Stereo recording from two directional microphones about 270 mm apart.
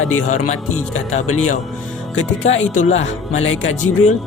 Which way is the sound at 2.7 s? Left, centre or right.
Left.